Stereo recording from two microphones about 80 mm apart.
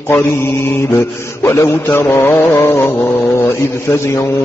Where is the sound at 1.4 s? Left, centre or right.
Left.